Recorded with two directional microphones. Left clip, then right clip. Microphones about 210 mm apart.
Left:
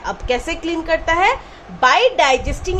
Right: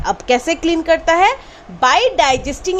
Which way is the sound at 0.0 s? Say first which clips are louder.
Right 5 dB; 45° right (ahead or behind).